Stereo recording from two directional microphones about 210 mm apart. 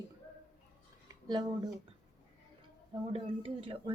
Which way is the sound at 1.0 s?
20° right (ahead or behind).